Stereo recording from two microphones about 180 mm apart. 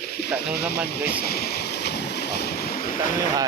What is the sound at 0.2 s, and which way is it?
Snake, 65° left (ahead or behind).